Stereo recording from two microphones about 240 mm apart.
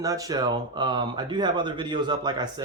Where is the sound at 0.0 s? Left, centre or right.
Centre.